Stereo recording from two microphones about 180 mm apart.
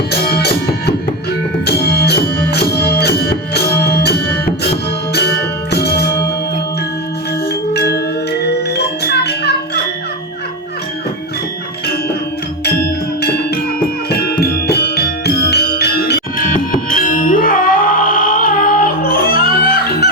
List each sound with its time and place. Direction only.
0.1 s music: 60° left (ahead or behind)
7.7 s music: 65° left (ahead or behind)
12.6 s music: 60° left (ahead or behind)
16.6 s music: 50° left (ahead or behind)